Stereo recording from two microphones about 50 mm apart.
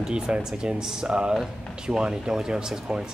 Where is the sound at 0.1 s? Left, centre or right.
Centre.